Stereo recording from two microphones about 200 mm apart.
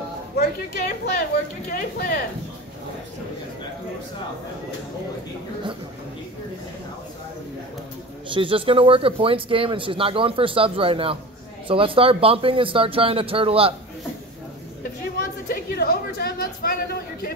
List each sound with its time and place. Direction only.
0.4 s a woman's voice: 50° left (ahead or behind)
8.3 s speech: 25° right (ahead or behind)
15.4 s a sound: 50° left (ahead or behind)